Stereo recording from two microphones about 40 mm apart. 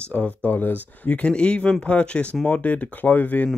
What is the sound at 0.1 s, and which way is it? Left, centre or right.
Speech, left.